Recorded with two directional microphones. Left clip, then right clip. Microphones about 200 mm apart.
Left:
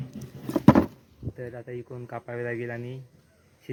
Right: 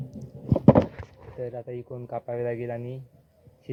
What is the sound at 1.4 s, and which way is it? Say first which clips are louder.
Speech: right 4 dB; 35° left (ahead or behind).